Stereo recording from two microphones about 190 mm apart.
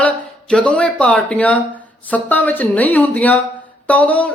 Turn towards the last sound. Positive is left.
turn(degrees=5)  # may be behind; listen again after turning